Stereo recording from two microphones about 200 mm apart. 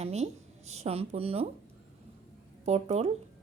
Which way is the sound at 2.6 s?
30° right (ahead or behind).